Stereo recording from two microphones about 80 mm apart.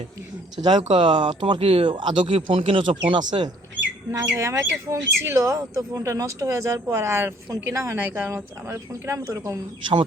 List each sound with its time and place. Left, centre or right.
0.5 s speech: right
3.1 s speech: right
4.4 s speech: right